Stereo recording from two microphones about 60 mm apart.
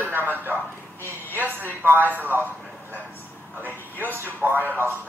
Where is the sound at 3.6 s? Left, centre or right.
Right.